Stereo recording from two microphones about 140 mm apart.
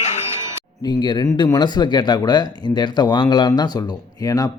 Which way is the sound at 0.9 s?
30° left (ahead or behind).